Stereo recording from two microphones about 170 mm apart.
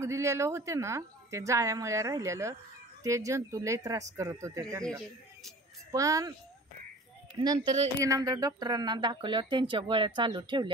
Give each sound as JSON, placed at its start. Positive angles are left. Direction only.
{"t": 0.0, "sound": "a woman's voice", "side_deg": -15}
{"t": 5.9, "sound": "speech", "side_deg": -20}
{"t": 7.3, "sound": "speech", "side_deg": -25}